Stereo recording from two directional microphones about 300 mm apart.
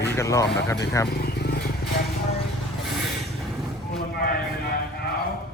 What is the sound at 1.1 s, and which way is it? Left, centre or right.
Vehicle, left.